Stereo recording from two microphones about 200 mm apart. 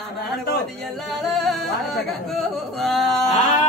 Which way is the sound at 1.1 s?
Centre (ahead or behind).